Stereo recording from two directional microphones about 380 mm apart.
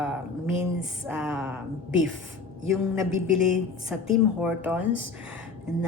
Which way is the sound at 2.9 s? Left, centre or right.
Centre.